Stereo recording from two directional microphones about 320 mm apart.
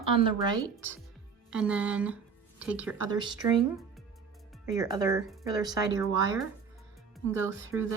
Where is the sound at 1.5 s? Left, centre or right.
Centre.